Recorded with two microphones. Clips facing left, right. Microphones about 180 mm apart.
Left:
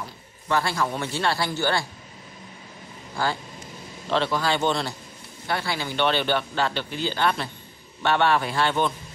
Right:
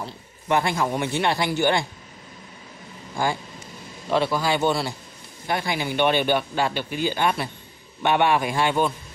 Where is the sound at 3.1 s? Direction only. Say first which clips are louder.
Right 2 dB; 15° right (ahead or behind).